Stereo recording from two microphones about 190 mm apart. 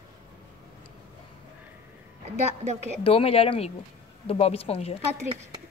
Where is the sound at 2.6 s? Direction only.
35° right (ahead or behind).